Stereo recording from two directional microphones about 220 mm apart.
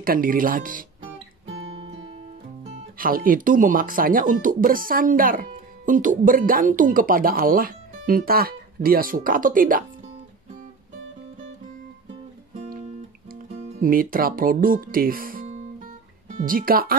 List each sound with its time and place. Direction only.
0.0 s speech: 40° right (ahead or behind)
1.7 s music: 25° right (ahead or behind)
3.0 s speech: 40° right (ahead or behind)
13.3 s speech: 40° right (ahead or behind)